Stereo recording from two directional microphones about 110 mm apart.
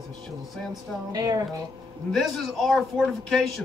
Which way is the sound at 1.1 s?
35° right (ahead or behind).